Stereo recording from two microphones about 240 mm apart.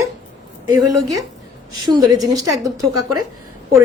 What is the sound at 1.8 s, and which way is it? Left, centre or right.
Speech, centre.